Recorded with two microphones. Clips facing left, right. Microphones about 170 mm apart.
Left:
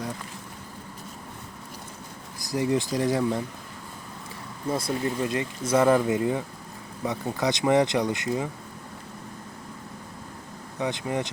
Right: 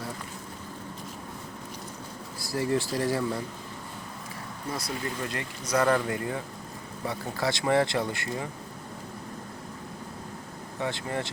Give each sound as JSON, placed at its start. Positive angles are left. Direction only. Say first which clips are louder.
{"t": 2.4, "sound": "speech", "louder": "left 2 dB", "side_deg": 15}
{"t": 4.7, "sound": "speech", "louder": "left 7 dB", "side_deg": 25}
{"t": 10.8, "sound": "speech", "louder": "left 3 dB", "side_deg": 15}